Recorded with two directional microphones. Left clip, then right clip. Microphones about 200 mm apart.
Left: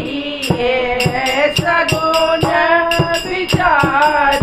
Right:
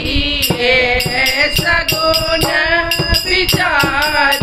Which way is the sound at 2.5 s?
20° right (ahead or behind).